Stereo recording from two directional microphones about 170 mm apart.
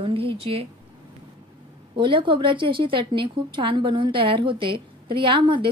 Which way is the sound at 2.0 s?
30° right (ahead or behind).